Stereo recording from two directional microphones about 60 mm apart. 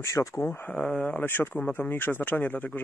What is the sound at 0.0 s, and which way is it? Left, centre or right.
Speech, left.